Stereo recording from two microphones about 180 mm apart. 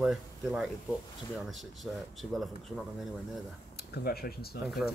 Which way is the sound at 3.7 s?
60° left (ahead or behind).